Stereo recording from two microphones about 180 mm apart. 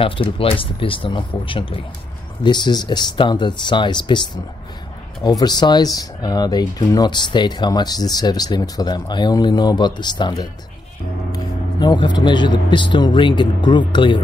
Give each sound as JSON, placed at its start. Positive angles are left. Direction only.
{"t": 0.0, "sound": "speech", "side_deg": 30}
{"t": 5.4, "sound": "speech", "side_deg": 20}